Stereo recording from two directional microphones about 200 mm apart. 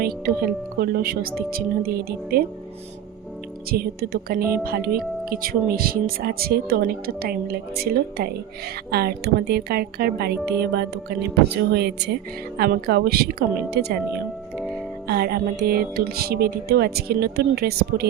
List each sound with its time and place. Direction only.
0.0 s speech: 50° right (ahead or behind)
3.7 s speech: 50° right (ahead or behind)
14.5 s music: centre (ahead or behind)
15.0 s speech: 50° right (ahead or behind)